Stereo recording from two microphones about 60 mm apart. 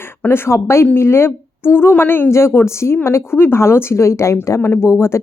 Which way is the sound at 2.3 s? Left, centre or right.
Left.